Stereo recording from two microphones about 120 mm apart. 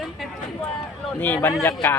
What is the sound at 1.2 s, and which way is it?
Speech, 15° left (ahead or behind).